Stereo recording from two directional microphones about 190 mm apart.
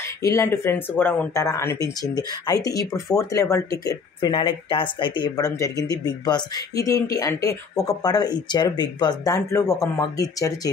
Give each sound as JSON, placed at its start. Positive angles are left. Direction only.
{"t": 0.2, "sound": "speech", "side_deg": 15}